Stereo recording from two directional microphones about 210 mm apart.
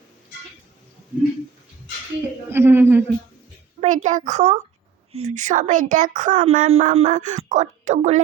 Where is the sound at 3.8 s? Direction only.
35° right (ahead or behind).